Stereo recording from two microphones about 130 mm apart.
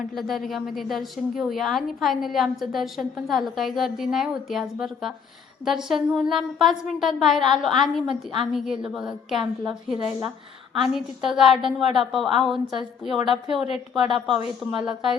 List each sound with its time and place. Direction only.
0.2 s a woman's voice: centre (ahead or behind)
8.0 s a woman's voice: 40° right (ahead or behind)
8.5 s a woman's voice: centre (ahead or behind)
10.8 s a woman's voice: 5° right (ahead or behind)
14.7 s a woman's voice: 40° right (ahead or behind)